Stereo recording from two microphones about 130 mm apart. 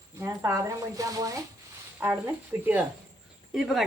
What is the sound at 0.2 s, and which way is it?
Speech, 25° right (ahead or behind).